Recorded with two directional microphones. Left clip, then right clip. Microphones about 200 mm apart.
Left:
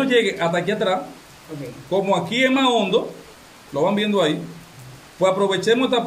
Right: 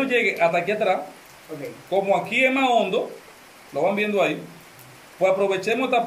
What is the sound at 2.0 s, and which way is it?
Speech, 30° left (ahead or behind).